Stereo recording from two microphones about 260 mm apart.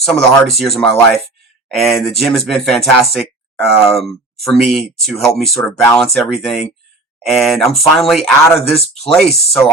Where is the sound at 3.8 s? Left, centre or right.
Left.